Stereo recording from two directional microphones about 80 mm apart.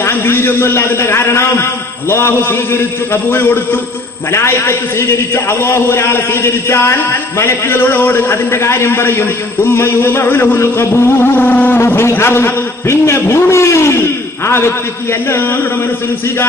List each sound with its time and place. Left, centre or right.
0.0 s a man's voice: left